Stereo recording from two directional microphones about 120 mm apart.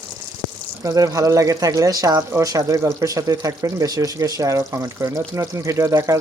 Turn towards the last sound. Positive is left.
turn(degrees=-25)  # may be behind; listen again after turning